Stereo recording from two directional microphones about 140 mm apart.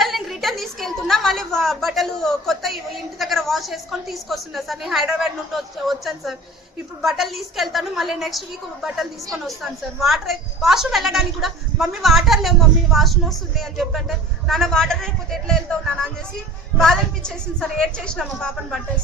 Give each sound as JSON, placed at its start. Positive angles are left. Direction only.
{"t": 0.0, "sound": "a woman's voice", "side_deg": 0}